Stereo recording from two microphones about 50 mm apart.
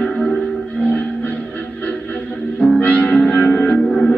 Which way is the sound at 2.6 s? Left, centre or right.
Left.